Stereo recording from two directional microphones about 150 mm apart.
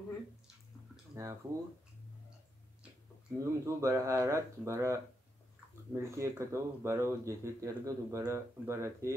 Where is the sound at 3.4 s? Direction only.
20° right (ahead or behind).